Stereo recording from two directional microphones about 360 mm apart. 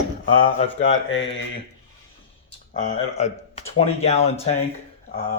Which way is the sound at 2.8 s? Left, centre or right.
Centre.